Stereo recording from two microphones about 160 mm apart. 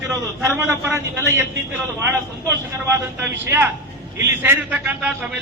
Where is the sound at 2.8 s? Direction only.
15° right (ahead or behind).